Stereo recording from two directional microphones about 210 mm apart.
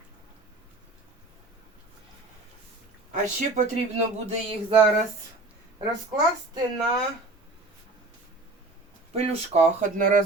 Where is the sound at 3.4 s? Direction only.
35° right (ahead or behind).